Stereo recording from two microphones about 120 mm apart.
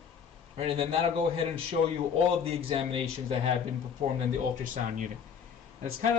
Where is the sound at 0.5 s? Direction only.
55° right (ahead or behind).